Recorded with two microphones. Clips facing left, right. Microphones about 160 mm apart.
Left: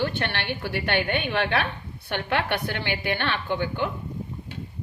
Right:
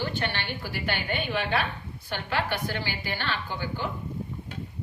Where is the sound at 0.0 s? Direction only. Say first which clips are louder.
Left 3 dB; 65° left (ahead or behind).